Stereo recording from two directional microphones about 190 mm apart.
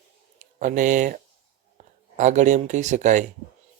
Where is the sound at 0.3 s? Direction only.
40° right (ahead or behind).